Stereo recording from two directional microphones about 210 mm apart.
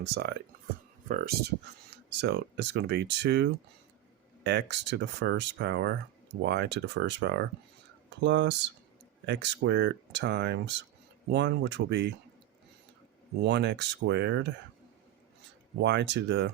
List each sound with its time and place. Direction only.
0.0 s speech: 50° right (ahead or behind)
13.4 s speech: 55° right (ahead or behind)
15.8 s speech: 55° right (ahead or behind)